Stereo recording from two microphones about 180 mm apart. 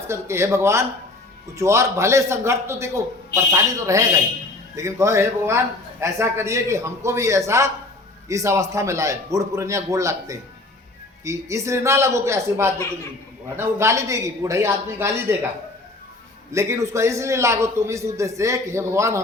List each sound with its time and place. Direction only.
0.1 s a man's voice: 15° right (ahead or behind)
16.5 s a man's voice: 15° right (ahead or behind)